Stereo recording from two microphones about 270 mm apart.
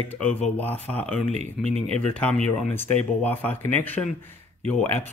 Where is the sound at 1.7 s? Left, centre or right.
Right.